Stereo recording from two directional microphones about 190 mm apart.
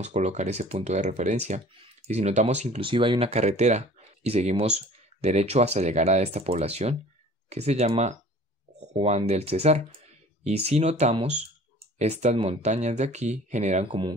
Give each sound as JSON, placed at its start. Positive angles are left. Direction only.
{"t": 0.0, "sound": "speech", "side_deg": -35}